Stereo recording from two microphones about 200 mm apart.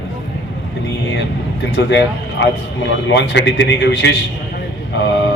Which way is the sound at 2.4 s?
65° left (ahead or behind).